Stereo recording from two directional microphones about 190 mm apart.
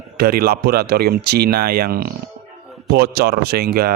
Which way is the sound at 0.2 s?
55° right (ahead or behind).